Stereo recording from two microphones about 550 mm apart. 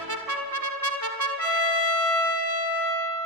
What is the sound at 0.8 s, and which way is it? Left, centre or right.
Trumpet, right.